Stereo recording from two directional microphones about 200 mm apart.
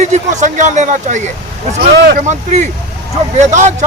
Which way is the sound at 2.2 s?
35° right (ahead or behind).